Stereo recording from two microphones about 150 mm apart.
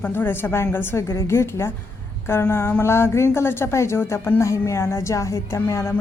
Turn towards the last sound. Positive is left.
turn(degrees=20)  # may be behind; listen again after turning